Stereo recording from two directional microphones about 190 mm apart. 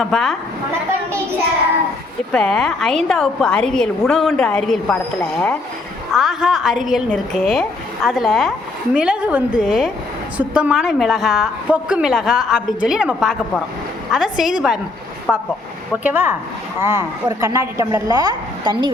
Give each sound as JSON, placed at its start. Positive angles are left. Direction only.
{"t": 0.0, "sound": "a woman's voice", "side_deg": 0}
{"t": 2.3, "sound": "a woman's voice", "side_deg": 5}